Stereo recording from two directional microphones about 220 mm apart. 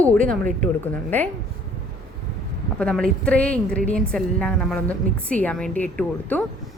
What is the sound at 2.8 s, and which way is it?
A woman's voice, 5° left (ahead or behind).